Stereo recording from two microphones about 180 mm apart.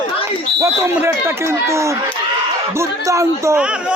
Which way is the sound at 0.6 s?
15° right (ahead or behind).